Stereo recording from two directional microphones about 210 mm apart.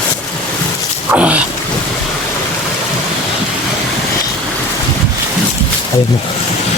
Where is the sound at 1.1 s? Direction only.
5° right (ahead or behind).